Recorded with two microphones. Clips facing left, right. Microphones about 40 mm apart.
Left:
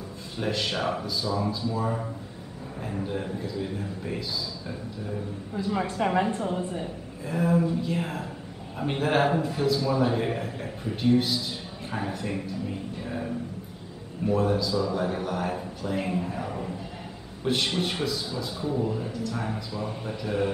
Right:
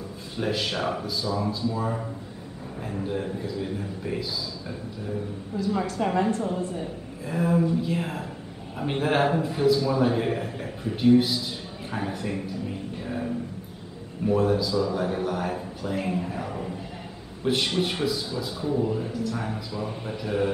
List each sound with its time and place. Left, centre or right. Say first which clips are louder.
0.4 s a man's voice: right 1 dB; centre
5.6 s a woman's voice: right 1 dB; centre
7.2 s a man's voice: right 1 dB; centre
11.9 s a sound: right 1 dB; centre
14.2 s a man's voice: right 2 dB; centre